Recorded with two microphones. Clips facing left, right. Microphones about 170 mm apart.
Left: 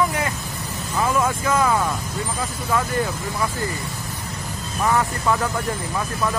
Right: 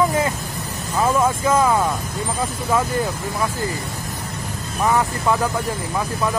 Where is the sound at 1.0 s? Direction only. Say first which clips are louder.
Right 3 dB; 25° right (ahead or behind).